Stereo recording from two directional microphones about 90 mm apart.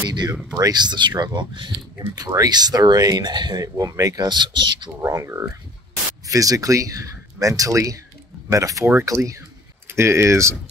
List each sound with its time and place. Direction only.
0.1 s speech: 55° right (ahead or behind)
2.1 s speech: 45° right (ahead or behind)
3.6 s speech: 40° right (ahead or behind)
5.0 s speech: 35° right (ahead or behind)